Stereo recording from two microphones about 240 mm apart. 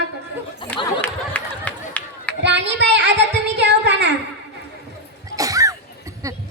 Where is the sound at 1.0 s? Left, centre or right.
Centre.